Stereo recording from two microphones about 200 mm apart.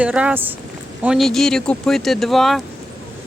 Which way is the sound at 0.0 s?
5° right (ahead or behind).